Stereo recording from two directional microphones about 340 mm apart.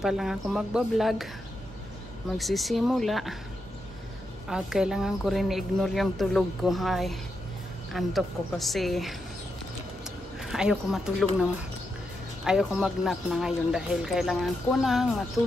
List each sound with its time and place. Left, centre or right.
0.0 s speech: centre
2.3 s speech: centre
4.5 s speech: centre